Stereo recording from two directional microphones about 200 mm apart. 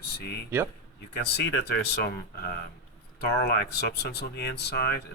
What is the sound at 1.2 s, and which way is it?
Speech, 55° left (ahead or behind).